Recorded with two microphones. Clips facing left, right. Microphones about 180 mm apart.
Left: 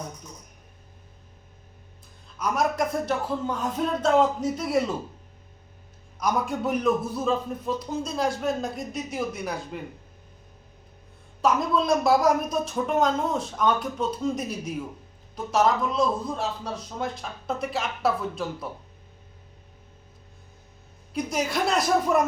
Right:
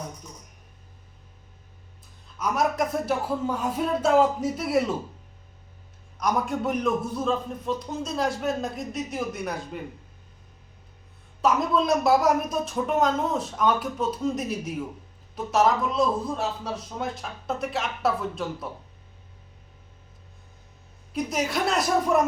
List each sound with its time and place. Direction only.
2.4 s a man's voice: centre (ahead or behind)
6.1 s a man's voice: centre (ahead or behind)
11.4 s a man's voice: centre (ahead or behind)
21.1 s a man's voice: centre (ahead or behind)